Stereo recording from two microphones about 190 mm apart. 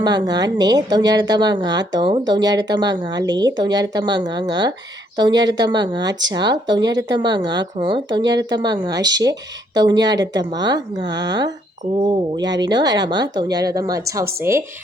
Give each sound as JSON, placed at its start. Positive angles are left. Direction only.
{"t": 0.0, "sound": "a woman's voice", "side_deg": -20}